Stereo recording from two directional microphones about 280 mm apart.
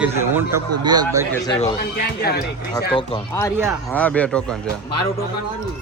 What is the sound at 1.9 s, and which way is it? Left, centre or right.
Speech, left.